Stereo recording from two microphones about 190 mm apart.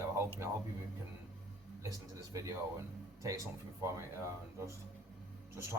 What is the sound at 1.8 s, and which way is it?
Speech, 20° right (ahead or behind).